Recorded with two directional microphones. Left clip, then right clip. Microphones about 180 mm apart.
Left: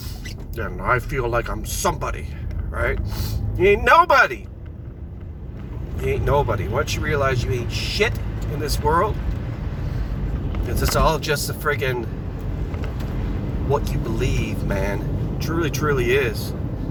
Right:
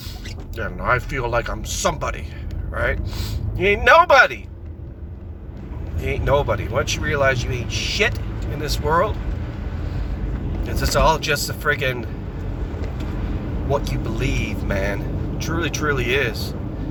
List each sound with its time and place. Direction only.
0.9 s speech: 15° right (ahead or behind)
3.6 s speech: 15° right (ahead or behind)
6.1 s speech: 15° right (ahead or behind)
10.7 s speech: 10° right (ahead or behind)
13.7 s speech: 10° right (ahead or behind)